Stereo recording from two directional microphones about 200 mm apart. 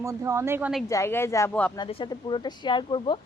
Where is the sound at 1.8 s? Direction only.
25° left (ahead or behind).